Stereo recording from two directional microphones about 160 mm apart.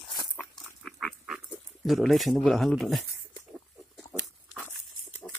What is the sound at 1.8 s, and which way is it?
Speech, centre (ahead or behind).